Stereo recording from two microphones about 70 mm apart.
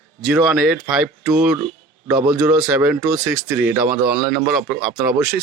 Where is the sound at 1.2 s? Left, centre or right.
Right.